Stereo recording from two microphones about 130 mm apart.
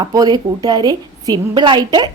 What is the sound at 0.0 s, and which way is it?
A woman's voice, 30° right (ahead or behind).